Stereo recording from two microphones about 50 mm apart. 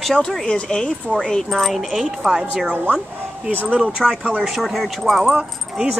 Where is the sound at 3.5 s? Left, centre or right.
Right.